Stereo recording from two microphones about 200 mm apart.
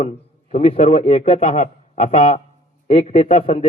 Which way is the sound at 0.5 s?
30° left (ahead or behind).